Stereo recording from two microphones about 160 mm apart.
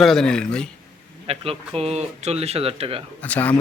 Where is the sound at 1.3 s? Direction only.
40° right (ahead or behind).